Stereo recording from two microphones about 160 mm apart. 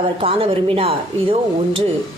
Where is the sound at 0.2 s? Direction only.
35° right (ahead or behind).